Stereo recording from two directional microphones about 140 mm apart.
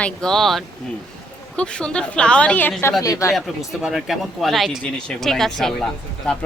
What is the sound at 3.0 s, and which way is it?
Speech, 25° left (ahead or behind).